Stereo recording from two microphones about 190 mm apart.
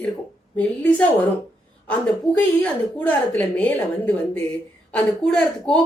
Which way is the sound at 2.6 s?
10° left (ahead or behind).